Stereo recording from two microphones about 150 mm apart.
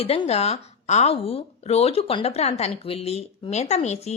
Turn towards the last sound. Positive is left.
turn(degrees=45)  # may be behind; listen again after turning